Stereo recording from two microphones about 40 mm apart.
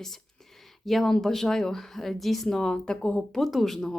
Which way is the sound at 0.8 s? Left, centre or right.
Centre.